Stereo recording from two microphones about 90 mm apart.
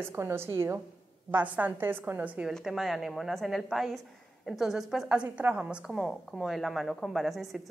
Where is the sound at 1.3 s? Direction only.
20° right (ahead or behind).